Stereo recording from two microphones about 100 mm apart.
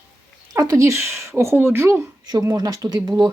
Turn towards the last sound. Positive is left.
turn(degrees=-50)  # may be behind; listen again after turning